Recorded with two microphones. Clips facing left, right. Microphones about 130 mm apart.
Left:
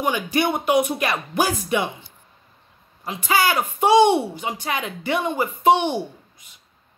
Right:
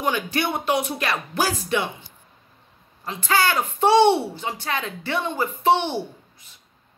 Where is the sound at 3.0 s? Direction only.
10° left (ahead or behind).